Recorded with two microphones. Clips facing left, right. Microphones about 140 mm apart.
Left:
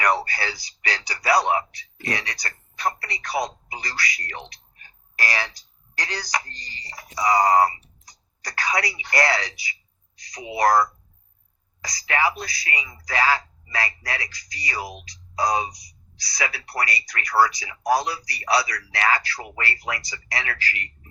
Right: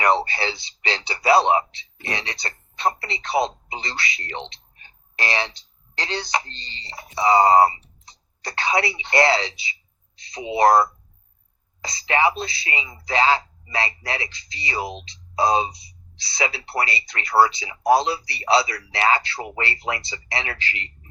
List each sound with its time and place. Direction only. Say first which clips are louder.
0.0 s speech: right 3 dB; 25° right (ahead or behind)